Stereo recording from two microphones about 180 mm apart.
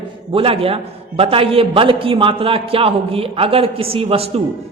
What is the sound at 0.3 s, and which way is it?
A man's voice, 30° right (ahead or behind).